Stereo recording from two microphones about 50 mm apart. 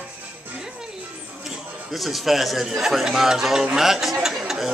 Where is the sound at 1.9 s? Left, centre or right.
Centre.